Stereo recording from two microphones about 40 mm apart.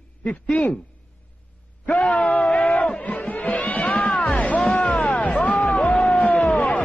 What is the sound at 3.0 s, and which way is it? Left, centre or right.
Music, left.